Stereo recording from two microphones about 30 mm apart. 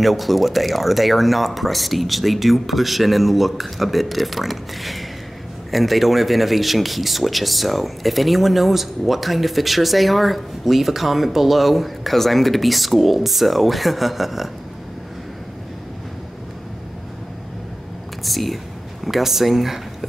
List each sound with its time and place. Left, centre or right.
0.0 s speech: centre
18.2 s speech: centre